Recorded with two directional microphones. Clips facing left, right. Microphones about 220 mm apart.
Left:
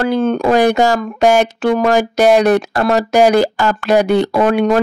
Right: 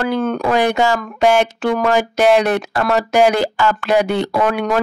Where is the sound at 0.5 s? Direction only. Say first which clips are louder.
Left 4 dB; 40° left (ahead or behind).